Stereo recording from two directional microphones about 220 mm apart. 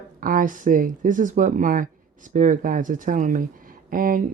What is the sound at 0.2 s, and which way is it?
Speech, 40° right (ahead or behind).